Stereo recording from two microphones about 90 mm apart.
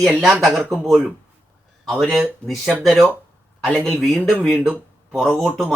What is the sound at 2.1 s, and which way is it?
Speech, centre (ahead or behind).